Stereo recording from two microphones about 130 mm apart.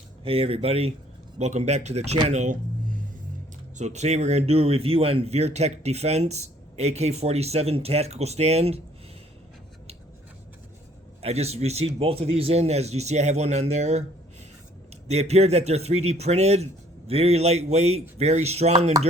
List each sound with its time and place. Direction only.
0.3 s speech: 45° right (ahead or behind); by 2.6 s 65° right (ahead or behind)
3.8 s speech: 60° right (ahead or behind)
11.2 s speech: 55° right (ahead or behind)
15.0 s speech: 55° right (ahead or behind)